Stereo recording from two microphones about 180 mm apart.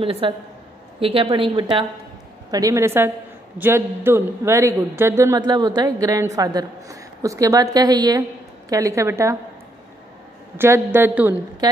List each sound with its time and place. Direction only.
0.0 s a man's voice: 30° right (ahead or behind)
10.6 s a man's voice: 10° right (ahead or behind)
11.6 s a woman's voice: 20° right (ahead or behind)